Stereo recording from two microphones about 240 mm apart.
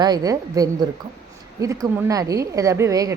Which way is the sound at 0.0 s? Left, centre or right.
Centre.